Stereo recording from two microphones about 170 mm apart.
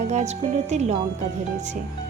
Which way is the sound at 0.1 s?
40° right (ahead or behind).